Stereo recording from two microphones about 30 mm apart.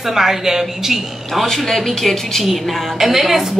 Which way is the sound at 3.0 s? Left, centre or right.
Centre.